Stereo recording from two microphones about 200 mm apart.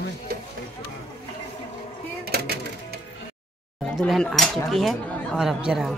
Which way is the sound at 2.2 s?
50° right (ahead or behind).